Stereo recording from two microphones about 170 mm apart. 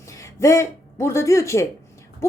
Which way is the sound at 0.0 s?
15° left (ahead or behind).